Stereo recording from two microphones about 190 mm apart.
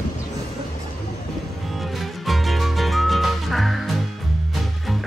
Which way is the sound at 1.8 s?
Centre (ahead or behind).